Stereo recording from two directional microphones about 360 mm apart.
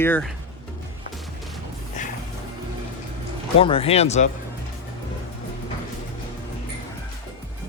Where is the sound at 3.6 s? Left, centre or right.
Centre.